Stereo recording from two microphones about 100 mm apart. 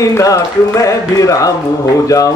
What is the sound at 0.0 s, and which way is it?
A man's voice, 35° left (ahead or behind).